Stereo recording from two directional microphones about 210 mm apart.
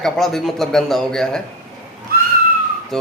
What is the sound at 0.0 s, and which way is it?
A man's voice, centre (ahead or behind).